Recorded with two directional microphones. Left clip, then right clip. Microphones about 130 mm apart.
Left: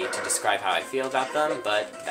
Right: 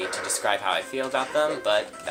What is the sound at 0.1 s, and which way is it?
Speech, 30° right (ahead or behind).